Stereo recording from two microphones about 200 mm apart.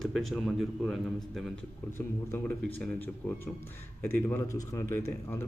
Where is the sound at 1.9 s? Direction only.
10° left (ahead or behind).